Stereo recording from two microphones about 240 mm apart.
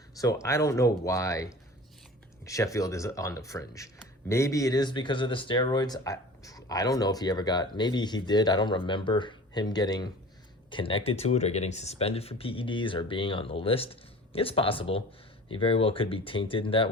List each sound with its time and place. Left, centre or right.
0.2 s speech: centre
2.4 s a sound: centre
2.7 s speech: centre